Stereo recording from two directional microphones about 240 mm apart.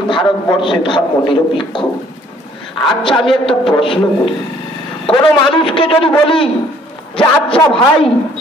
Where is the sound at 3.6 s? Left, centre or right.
Left.